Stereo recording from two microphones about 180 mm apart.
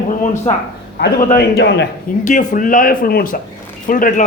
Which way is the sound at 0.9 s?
60° left (ahead or behind).